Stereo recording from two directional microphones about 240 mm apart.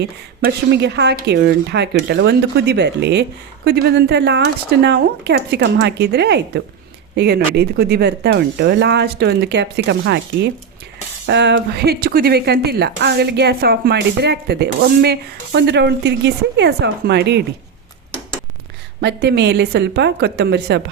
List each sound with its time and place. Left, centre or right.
0.0 s speech: right
19.0 s speech: right